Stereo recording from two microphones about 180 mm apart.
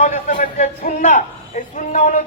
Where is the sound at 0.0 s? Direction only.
45° left (ahead or behind).